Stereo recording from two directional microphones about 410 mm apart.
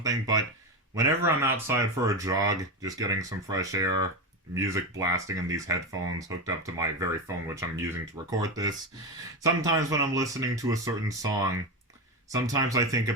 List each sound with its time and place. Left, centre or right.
0.0 s speech: centre